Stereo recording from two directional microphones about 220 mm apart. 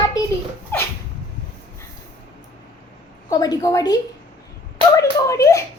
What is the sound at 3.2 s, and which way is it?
A woman's voice, 15° left (ahead or behind).